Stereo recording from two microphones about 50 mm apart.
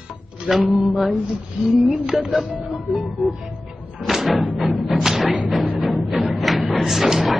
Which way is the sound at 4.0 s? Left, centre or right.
Centre.